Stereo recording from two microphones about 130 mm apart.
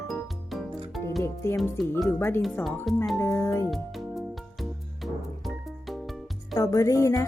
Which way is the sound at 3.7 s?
Centre (ahead or behind).